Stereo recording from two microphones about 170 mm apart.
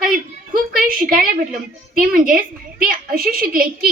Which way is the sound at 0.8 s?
55° right (ahead or behind).